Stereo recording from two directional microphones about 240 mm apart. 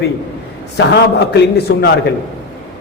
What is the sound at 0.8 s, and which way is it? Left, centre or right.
A man's voice, left.